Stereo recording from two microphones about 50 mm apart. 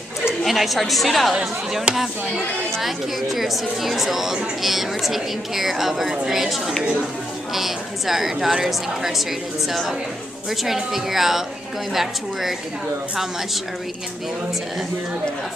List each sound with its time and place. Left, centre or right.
0.5 s a woman's voice: centre
1.9 s speech: right
2.8 s a woman's voice: centre